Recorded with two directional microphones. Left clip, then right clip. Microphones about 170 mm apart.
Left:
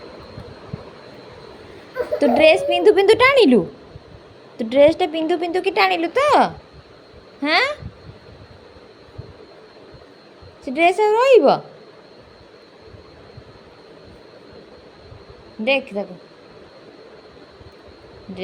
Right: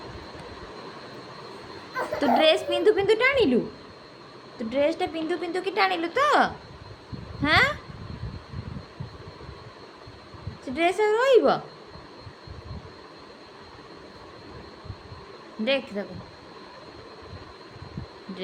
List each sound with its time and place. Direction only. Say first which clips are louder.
2.2 s a woman's voice: left 7 dB; 25° left (ahead or behind)
2.9 s a woman's voice: left 9 dB; 45° left (ahead or behind); by 7.8 s 25° left (ahead or behind)
10.8 s a woman's voice: left 7 dB; 25° left (ahead or behind)
15.6 s a woman's voice: left 6 dB; 20° left (ahead or behind)